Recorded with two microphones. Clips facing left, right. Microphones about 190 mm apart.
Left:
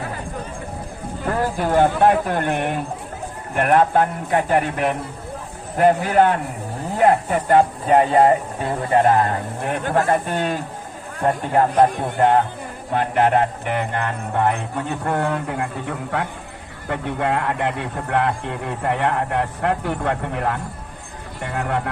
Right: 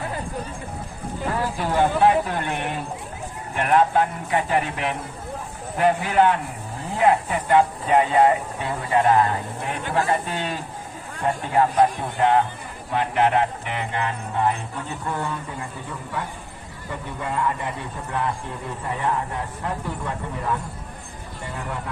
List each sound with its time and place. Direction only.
1.3 s speech: 50° left (ahead or behind)
12.9 s music: 45° left (ahead or behind); by 16.3 s 75° left (ahead or behind)
16.8 s speech: 75° left (ahead or behind)